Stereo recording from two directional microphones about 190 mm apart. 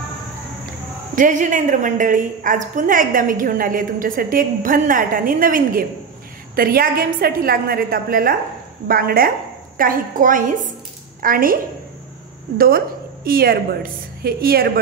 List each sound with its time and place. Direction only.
1.1 s a woman's voice: 45° right (ahead or behind)
12.5 s a woman's voice: 50° right (ahead or behind)